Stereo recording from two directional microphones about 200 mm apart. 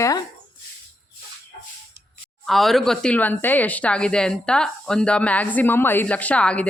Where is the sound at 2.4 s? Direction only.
Centre (ahead or behind).